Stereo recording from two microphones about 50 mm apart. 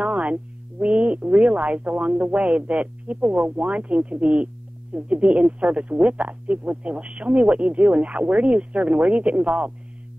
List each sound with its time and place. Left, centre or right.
0.0 s speech: right